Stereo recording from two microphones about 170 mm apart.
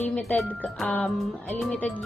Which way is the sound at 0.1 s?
10° left (ahead or behind).